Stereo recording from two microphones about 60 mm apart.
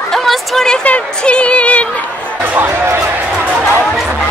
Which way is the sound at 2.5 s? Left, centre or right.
Right.